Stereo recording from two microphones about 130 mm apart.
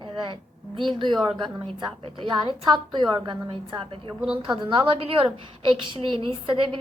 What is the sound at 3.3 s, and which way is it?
Speech, 40° right (ahead or behind).